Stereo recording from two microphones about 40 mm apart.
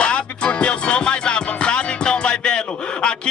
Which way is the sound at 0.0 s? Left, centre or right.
Left.